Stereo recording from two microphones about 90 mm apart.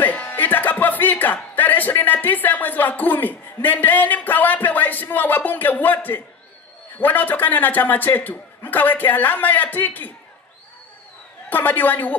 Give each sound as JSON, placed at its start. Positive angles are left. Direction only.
{"t": 0.0, "sound": "a man's voice", "side_deg": 20}
{"t": 11.4, "sound": "a man's voice", "side_deg": 20}